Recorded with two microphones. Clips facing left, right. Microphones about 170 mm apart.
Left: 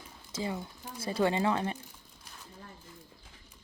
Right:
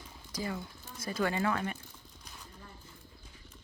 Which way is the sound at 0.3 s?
25° left (ahead or behind).